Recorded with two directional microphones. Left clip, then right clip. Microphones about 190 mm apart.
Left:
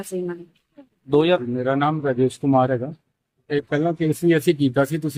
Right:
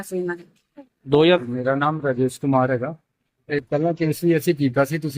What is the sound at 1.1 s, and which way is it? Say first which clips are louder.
Speech: right 2 dB; 50° right (ahead or behind).